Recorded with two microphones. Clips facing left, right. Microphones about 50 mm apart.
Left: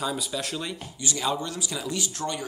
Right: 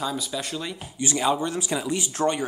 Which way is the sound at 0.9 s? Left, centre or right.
Right.